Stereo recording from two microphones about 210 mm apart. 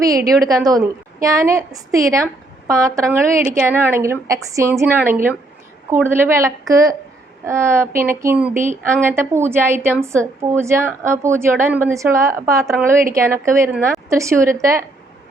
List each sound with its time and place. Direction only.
0.4 s a woman's voice: 15° right (ahead or behind)